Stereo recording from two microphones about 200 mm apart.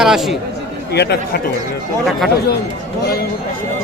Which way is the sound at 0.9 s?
55° left (ahead or behind).